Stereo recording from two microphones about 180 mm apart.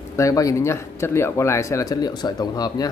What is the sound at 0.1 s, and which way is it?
Speech, 20° left (ahead or behind).